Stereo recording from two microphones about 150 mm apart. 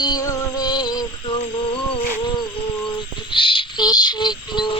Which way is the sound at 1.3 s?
40° left (ahead or behind).